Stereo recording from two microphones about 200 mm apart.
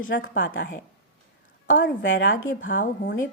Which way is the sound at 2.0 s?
70° left (ahead or behind).